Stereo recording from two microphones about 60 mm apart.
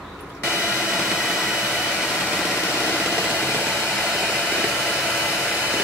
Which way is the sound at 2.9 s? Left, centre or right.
Centre.